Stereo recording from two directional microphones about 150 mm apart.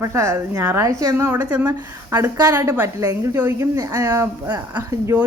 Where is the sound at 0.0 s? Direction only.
20° right (ahead or behind).